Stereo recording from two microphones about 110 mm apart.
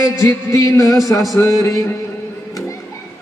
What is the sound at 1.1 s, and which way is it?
Speech, 30° left (ahead or behind).